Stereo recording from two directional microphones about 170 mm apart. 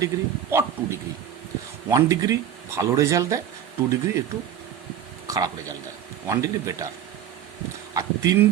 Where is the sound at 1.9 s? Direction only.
20° right (ahead or behind).